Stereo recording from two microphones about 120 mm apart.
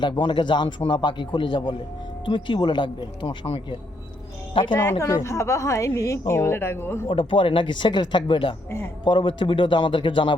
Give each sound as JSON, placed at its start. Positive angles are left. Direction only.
{"t": 0.0, "sound": "speech", "side_deg": 40}
{"t": 4.7, "sound": "a woman's voice", "side_deg": 20}
{"t": 7.1, "sound": "speech", "side_deg": 50}